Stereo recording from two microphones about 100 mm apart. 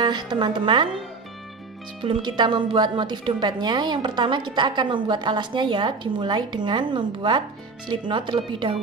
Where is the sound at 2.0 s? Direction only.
55° right (ahead or behind).